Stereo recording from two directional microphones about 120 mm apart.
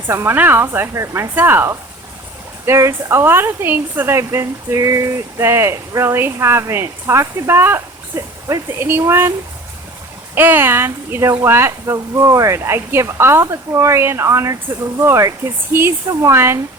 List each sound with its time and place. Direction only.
0.1 s speech: 20° right (ahead or behind)
10.3 s speech: 15° right (ahead or behind)